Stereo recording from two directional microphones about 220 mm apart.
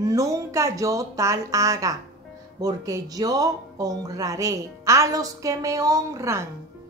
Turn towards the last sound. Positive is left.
turn(degrees=-15)  # may be behind; listen again after turning